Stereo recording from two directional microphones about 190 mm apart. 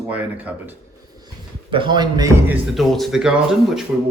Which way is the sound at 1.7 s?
25° right (ahead or behind).